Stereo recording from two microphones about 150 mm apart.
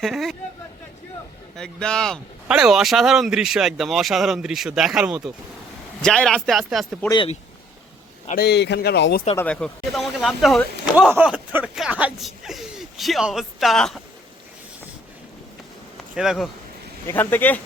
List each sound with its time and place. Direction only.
0.0 s speech: centre (ahead or behind)
1.5 s speech: 5° left (ahead or behind)
6.0 s speech: 5° left (ahead or behind)
8.4 s speech: 90° left
9.3 s speech: 10° left (ahead or behind)
10.9 s speech: 10° right (ahead or behind)
16.1 s speech: 5° right (ahead or behind)
17.1 s speech: 15° left (ahead or behind)